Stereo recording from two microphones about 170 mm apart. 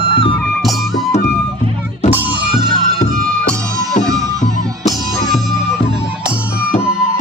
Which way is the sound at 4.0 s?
45° left (ahead or behind).